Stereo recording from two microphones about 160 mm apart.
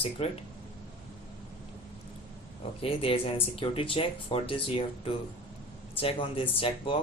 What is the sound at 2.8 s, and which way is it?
Speech, 35° left (ahead or behind).